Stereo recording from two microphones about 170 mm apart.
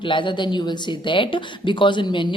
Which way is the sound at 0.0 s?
30° left (ahead or behind).